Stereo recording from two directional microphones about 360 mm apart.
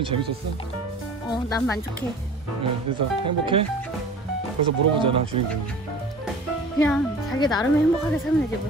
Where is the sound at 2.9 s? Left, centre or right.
Right.